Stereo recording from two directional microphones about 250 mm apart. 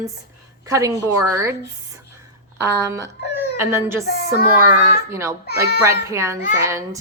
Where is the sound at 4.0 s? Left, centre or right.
Left.